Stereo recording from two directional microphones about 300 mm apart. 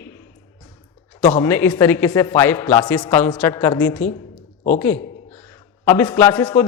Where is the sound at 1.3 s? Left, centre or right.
Centre.